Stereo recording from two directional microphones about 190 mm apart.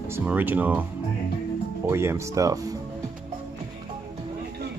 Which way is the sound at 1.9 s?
15° right (ahead or behind).